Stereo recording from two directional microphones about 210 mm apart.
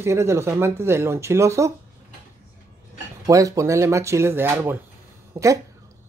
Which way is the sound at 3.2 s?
15° right (ahead or behind).